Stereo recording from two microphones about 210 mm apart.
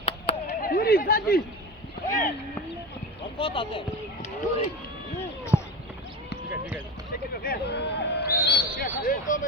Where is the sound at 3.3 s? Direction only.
25° left (ahead or behind).